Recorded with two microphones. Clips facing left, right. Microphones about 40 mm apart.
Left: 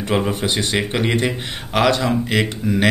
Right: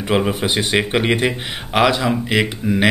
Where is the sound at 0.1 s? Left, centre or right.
Centre.